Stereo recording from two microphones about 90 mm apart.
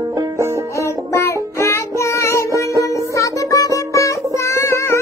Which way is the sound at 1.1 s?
30° left (ahead or behind).